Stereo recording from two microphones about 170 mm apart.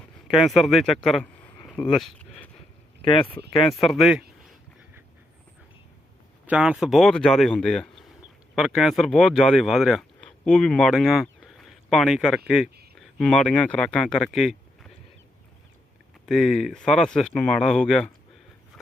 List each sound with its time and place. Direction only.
0.3 s speech: centre (ahead or behind)
1.7 s a sound: 5° left (ahead or behind)
3.0 s speech: 30° left (ahead or behind)
3.8 s speech: centre (ahead or behind)
6.4 s speech: 5° right (ahead or behind)
16.2 s speech: centre (ahead or behind)